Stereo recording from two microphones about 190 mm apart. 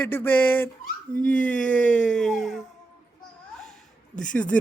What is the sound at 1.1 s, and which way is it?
Speech, 45° left (ahead or behind).